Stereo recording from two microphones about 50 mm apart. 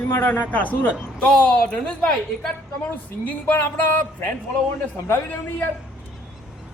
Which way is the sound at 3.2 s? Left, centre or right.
Left.